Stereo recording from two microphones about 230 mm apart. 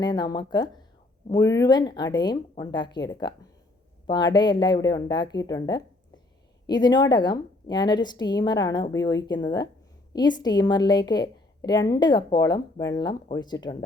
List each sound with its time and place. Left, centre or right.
0.0 s a woman's voice: centre